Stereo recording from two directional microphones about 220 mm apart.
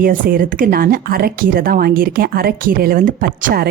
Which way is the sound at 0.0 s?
40° right (ahead or behind).